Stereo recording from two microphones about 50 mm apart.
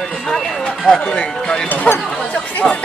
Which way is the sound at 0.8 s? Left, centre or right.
Centre.